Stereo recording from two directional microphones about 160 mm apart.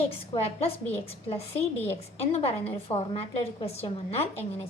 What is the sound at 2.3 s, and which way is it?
A woman's voice, 40° left (ahead or behind).